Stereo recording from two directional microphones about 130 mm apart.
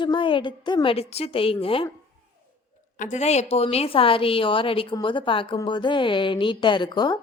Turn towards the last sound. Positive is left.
turn(degrees=35)  # may be behind; listen again after turning